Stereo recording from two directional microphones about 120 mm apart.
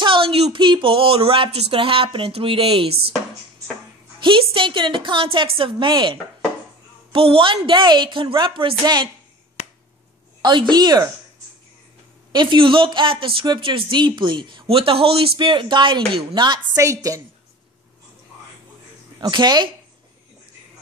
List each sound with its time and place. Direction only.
0.0 s speech: 45° right (ahead or behind)
4.2 s speech: 45° right (ahead or behind)
9.6 s finger snapping: 65° left (ahead or behind)
10.4 s speech: 40° right (ahead or behind)
12.3 s speech: 40° right (ahead or behind)
16.8 s a woman's voice: 25° right (ahead or behind)
19.1 s speech: 35° right (ahead or behind)